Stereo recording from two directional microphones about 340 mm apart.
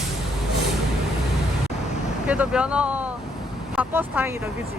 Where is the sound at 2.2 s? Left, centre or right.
Centre.